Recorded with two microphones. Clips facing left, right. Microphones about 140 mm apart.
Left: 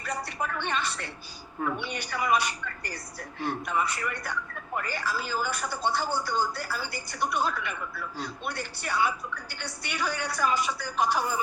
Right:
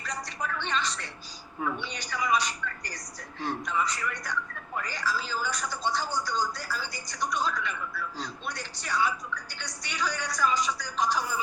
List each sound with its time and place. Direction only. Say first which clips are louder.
0.0 s music: left 3 dB; 55° left (ahead or behind)
1.8 s a woman's voice: left 2 dB; 55° left (ahead or behind)